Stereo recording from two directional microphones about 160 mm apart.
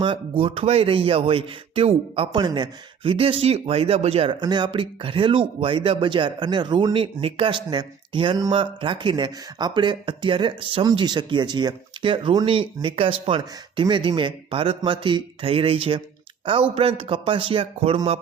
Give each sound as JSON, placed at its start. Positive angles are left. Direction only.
{"t": 0.0, "sound": "speech", "side_deg": -35}